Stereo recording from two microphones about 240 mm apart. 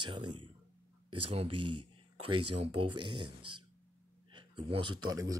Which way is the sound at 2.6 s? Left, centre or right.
Right.